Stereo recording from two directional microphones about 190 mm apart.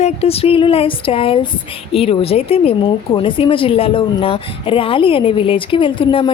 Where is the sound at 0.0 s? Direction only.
30° left (ahead or behind).